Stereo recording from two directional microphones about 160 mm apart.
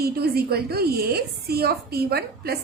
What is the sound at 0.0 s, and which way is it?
A woman's voice, 80° right.